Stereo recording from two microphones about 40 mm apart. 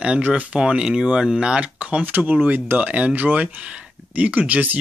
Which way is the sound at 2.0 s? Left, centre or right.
Right.